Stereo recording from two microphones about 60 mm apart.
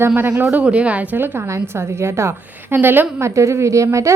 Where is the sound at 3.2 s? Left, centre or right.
Right.